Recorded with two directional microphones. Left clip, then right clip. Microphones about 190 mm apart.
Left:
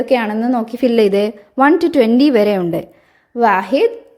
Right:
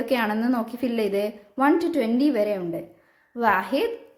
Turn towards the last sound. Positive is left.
turn(degrees=30)  # may be behind; listen again after turning